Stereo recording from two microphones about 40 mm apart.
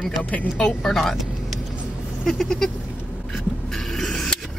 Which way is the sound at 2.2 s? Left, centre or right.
Centre.